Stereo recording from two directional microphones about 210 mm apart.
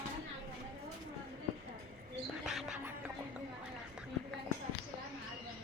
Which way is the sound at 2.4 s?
Centre (ahead or behind).